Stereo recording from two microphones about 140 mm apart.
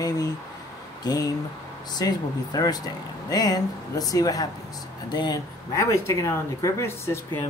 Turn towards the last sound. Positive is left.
turn(degrees=20)  # may be behind; listen again after turning